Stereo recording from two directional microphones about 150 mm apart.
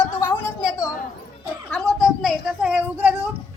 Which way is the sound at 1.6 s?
5° left (ahead or behind).